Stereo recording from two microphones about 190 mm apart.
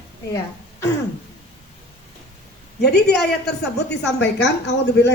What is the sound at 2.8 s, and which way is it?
A woman's voice, 60° left (ahead or behind).